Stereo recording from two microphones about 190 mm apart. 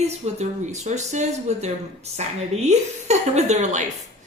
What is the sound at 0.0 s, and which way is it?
Speech, 35° right (ahead or behind).